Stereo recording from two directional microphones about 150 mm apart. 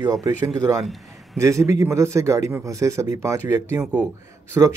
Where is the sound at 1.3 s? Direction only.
20° right (ahead or behind).